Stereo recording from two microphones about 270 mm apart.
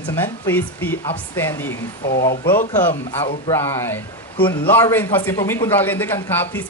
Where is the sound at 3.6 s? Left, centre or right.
Centre.